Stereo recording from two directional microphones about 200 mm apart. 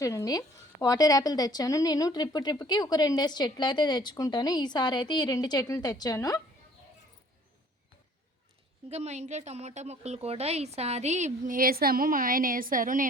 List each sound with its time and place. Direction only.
0.0 s speech: 15° left (ahead or behind)
8.9 s speech: 35° right (ahead or behind)